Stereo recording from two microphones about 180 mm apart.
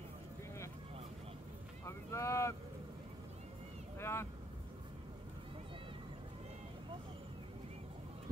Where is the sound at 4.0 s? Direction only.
15° left (ahead or behind).